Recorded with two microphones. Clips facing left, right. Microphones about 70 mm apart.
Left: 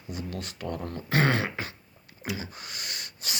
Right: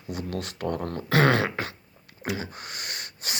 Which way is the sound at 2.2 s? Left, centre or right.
Right.